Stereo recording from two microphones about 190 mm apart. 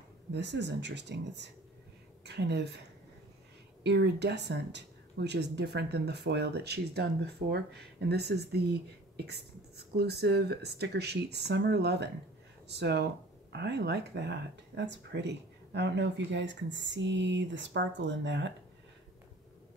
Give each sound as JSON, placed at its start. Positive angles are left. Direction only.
{"t": 0.3, "sound": "speech", "side_deg": -65}
{"t": 3.8, "sound": "speech", "side_deg": -65}